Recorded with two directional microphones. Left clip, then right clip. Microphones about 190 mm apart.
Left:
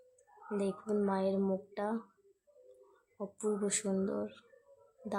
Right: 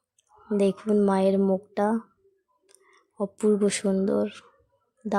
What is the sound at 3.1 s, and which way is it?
Speech, 40° right (ahead or behind).